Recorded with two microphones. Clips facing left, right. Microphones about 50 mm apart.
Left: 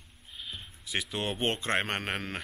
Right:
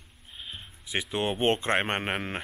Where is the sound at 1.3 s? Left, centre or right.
Right.